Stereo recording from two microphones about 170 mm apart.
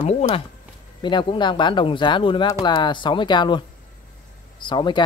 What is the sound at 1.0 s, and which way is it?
Speech, 30° left (ahead or behind).